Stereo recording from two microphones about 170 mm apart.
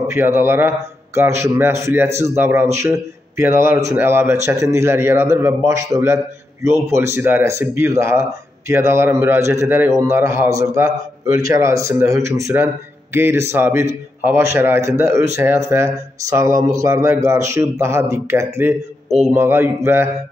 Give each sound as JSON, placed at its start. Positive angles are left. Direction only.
{"t": 0.1, "sound": "a man's voice", "side_deg": -15}
{"t": 19.0, "sound": "a man's voice", "side_deg": 0}
{"t": 19.3, "sound": "a man's voice", "side_deg": -15}